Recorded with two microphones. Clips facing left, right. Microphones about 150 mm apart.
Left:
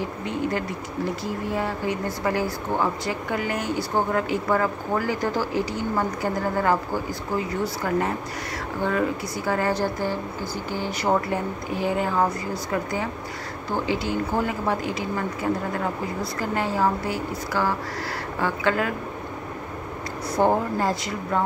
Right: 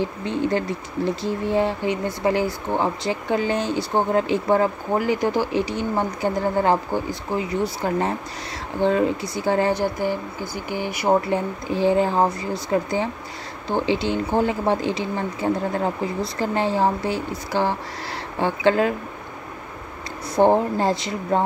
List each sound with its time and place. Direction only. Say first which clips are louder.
0.0 s speech: right 3 dB; 30° right (ahead or behind)
20.3 s speech: right 4 dB; 25° right (ahead or behind)